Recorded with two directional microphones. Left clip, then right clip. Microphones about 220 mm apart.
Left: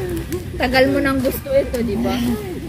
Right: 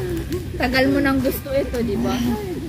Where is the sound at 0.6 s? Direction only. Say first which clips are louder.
Left 3 dB; 10° left (ahead or behind).